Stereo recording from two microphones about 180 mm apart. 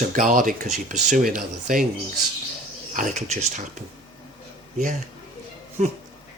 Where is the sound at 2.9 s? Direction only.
45° right (ahead or behind).